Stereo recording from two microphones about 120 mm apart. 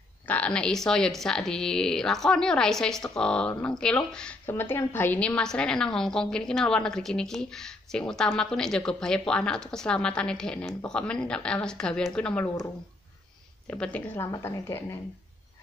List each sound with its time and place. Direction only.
0.3 s a woman's voice: 10° left (ahead or behind)
4.5 s a woman's voice: 20° left (ahead or behind)
13.7 s a woman's voice: 10° left (ahead or behind)
14.1 s a woman's voice: 20° left (ahead or behind)